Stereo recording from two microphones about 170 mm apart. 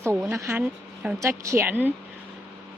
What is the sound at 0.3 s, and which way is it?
Speech, 15° right (ahead or behind).